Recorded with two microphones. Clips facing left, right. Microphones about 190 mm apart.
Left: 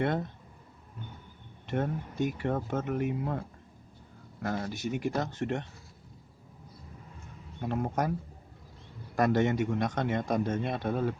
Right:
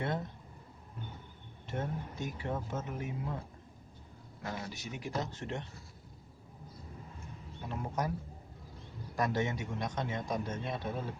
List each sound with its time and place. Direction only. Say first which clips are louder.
1.6 s a man's voice: left 6 dB; 60° left (ahead or behind)
4.4 s a man's voice: left 8 dB; 55° left (ahead or behind)
7.6 s a man's voice: left 6 dB; 60° left (ahead or behind)
9.1 s a man's voice: left 7 dB; 60° left (ahead or behind)